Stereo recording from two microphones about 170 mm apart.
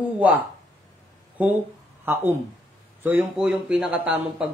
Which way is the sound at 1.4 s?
10° right (ahead or behind).